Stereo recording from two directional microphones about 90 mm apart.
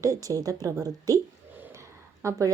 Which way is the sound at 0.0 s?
40° right (ahead or behind).